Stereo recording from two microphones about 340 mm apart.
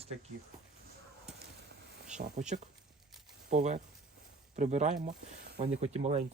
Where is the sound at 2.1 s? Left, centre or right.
Right.